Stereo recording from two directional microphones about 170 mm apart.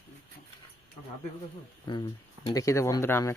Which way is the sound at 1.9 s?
30° left (ahead or behind).